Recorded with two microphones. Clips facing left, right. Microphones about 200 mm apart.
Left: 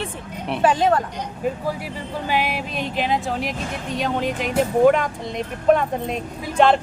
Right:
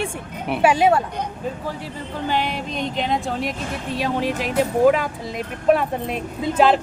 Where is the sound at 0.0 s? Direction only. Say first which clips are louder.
Right 2 dB; 5° right (ahead or behind).